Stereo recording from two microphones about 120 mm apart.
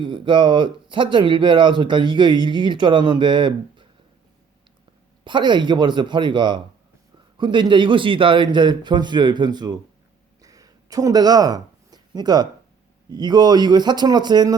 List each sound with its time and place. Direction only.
0.0 s speech: 40° right (ahead or behind)
5.2 s speech: 40° right (ahead or behind)
10.4 s a sound: 30° right (ahead or behind)
13.1 s speech: 35° right (ahead or behind)